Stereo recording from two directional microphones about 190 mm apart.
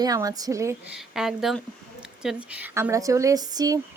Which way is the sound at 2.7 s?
15° right (ahead or behind).